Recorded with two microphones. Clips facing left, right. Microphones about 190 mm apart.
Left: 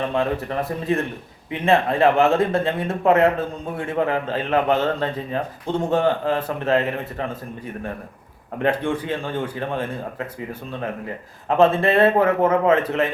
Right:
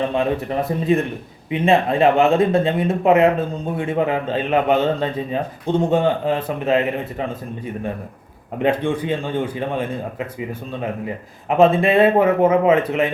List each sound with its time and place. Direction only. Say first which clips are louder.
0.1 s a man's voice: right 2 dB; 20° right (ahead or behind)
8.5 s a man's voice: right 2 dB; 20° right (ahead or behind)